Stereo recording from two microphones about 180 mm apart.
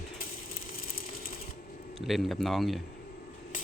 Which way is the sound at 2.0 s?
Centre (ahead or behind).